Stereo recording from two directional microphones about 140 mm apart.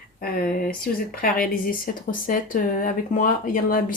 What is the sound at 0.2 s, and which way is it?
Speech, 90° left.